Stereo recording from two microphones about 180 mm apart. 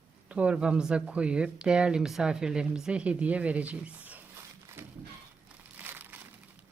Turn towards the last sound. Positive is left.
turn(degrees=-10)  # may be behind; listen again after turning